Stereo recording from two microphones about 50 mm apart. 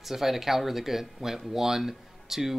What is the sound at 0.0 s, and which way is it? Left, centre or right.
Speech, centre.